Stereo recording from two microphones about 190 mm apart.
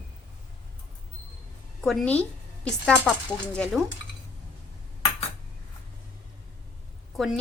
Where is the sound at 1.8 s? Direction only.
5° left (ahead or behind).